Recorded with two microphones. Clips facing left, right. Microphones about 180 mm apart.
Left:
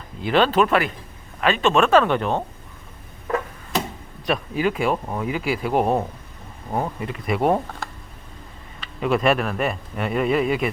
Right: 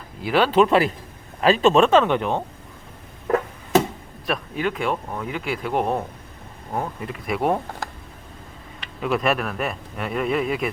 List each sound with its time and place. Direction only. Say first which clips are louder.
0.2 s speech: left 1 dB; 5° right (ahead or behind)
0.5 s speech: right 2 dB; 25° right (ahead or behind)
4.3 s speech: left 3 dB; 5° left (ahead or behind)
9.0 s speech: left 3 dB; centre (ahead or behind)